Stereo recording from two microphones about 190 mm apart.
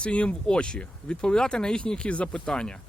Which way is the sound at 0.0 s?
5° left (ahead or behind).